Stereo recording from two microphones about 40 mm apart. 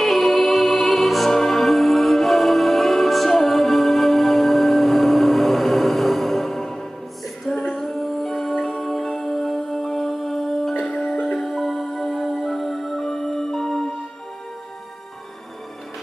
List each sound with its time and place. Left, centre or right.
0.0 s music: centre